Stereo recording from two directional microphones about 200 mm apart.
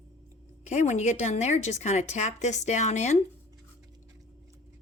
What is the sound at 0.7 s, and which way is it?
A woman's voice, 35° left (ahead or behind).